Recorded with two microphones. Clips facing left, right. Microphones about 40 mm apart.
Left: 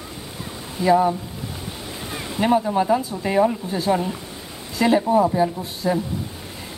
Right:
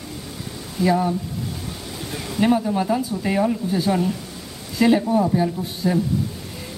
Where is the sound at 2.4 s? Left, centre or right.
Centre.